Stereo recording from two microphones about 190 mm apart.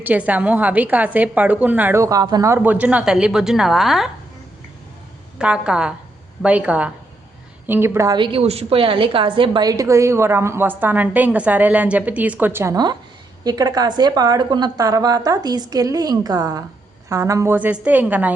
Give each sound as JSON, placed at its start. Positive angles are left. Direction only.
{"t": 0.0, "sound": "a woman's voice", "side_deg": -10}
{"t": 5.4, "sound": "a woman's voice", "side_deg": -5}